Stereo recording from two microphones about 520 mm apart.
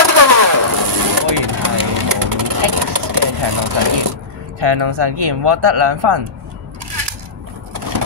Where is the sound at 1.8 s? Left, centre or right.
Right.